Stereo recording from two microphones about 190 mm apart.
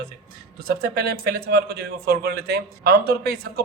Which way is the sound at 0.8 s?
55° right (ahead or behind).